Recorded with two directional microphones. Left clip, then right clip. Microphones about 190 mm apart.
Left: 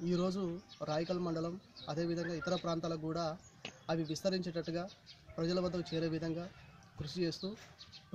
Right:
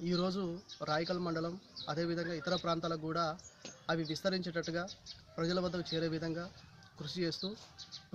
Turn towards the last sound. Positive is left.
turn(degrees=0)  # may be behind; listen again after turning